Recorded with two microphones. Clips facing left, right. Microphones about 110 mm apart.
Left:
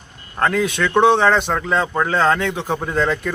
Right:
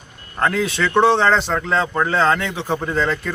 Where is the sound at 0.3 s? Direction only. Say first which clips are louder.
Left 1 dB; centre (ahead or behind).